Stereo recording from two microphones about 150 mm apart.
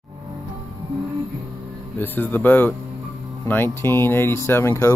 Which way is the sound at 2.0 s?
15° left (ahead or behind).